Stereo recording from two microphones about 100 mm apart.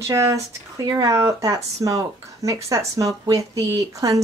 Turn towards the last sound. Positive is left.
turn(degrees=-35)  # may be behind; listen again after turning